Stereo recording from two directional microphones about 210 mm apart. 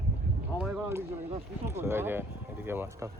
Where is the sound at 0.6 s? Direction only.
5° right (ahead or behind).